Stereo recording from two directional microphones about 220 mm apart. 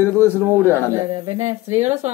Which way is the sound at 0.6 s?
10° right (ahead or behind).